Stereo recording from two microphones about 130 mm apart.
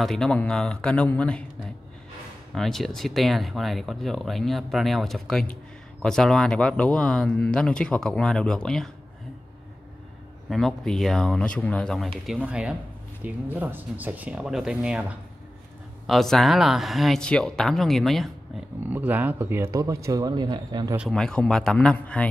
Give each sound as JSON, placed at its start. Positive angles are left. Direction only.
{"t": 0.0, "sound": "speech", "side_deg": 5}
{"t": 2.5, "sound": "speech", "side_deg": 0}
{"t": 10.5, "sound": "speech", "side_deg": 0}
{"t": 12.4, "sound": "speech", "side_deg": -10}
{"t": 18.8, "sound": "speech", "side_deg": -15}
{"t": 21.1, "sound": "speech", "side_deg": 5}